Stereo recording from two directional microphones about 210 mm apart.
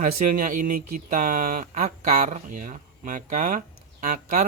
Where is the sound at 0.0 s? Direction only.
40° right (ahead or behind).